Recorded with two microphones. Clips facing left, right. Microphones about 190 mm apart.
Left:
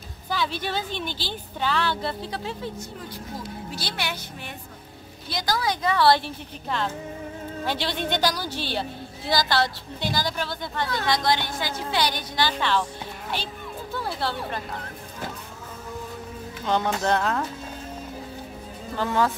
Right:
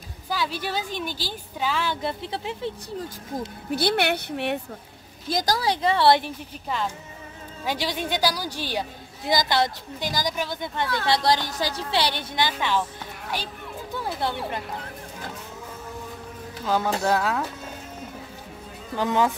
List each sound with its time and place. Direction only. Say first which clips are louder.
0.3 s a woman's voice: even; 10° right (ahead or behind)
3.3 s speech: right 9 dB; 60° right (ahead or behind)
5.3 s a woman's voice: right 3 dB; 40° right (ahead or behind); by 10.9 s 20° right (ahead or behind)
11.1 s a woman's voice: right 2 dB; 35° right (ahead or behind); by 12.8 s 15° right (ahead or behind)
13.9 s a woman's voice: right 1 dB; 15° right (ahead or behind)
16.6 s speech: even; 5° right (ahead or behind)
18.9 s a woman's voice: right 1 dB; 15° right (ahead or behind)